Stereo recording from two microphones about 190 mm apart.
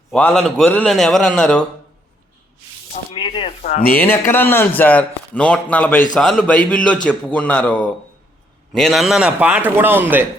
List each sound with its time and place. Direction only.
0.1 s a man's voice: 5° left (ahead or behind)
3.1 s rub: 30° left (ahead or behind)
3.6 s speech: 35° left (ahead or behind)
3.9 s a man's voice: 10° left (ahead or behind); by 10.2 s 10° right (ahead or behind)